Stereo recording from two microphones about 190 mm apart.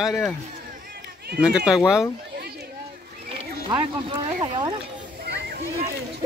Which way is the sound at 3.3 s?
25° right (ahead or behind).